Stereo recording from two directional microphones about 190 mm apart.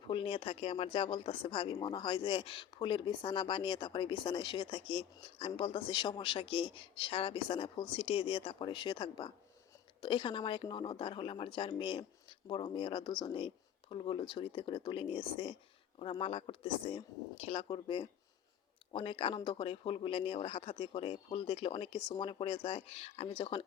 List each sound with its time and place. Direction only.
0.1 s speech: 30° left (ahead or behind)